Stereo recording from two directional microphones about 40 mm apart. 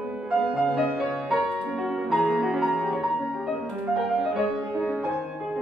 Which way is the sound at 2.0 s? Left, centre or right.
Centre.